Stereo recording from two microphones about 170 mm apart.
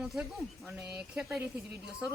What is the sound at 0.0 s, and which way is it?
Speech, 5° right (ahead or behind).